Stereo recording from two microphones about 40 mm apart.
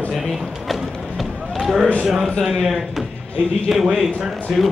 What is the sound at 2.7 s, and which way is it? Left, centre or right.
A man's voice, centre.